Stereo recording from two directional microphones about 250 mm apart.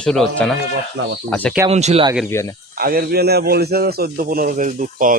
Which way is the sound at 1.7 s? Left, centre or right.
Right.